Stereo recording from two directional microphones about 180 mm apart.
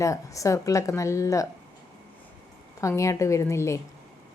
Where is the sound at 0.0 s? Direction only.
15° left (ahead or behind).